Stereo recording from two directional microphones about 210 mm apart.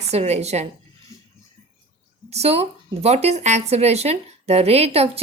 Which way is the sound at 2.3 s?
30° right (ahead or behind).